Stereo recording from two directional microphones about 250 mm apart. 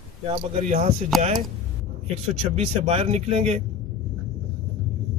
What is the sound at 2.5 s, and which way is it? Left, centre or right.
Speech, right.